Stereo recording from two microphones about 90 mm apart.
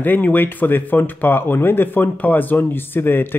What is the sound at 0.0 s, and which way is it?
Speech, 20° left (ahead or behind).